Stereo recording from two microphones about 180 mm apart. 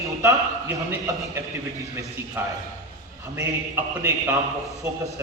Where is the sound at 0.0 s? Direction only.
15° right (ahead or behind).